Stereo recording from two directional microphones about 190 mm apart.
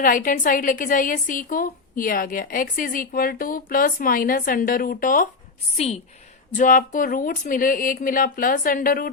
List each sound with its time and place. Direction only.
0.0 s a woman's voice: 45° left (ahead or behind)
5.7 s a woman's voice: 35° left (ahead or behind)